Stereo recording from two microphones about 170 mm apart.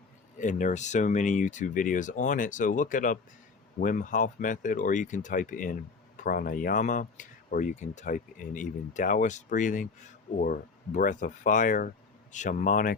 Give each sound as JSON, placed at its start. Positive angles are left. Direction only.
{"t": 0.3, "sound": "speech", "side_deg": 45}